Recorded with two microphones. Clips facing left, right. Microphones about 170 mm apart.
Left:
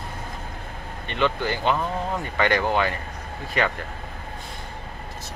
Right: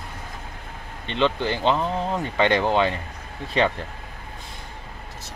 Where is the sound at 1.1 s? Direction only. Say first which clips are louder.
Right 2 dB; 25° right (ahead or behind).